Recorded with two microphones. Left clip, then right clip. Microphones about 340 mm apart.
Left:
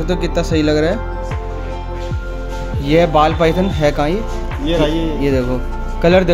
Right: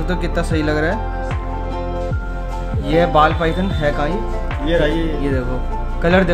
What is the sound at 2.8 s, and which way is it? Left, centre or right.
Speech, centre.